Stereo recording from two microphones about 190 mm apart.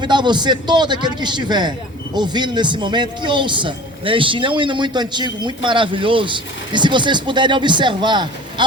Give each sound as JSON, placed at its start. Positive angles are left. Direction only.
{"t": 0.0, "sound": "a man's voice", "side_deg": -25}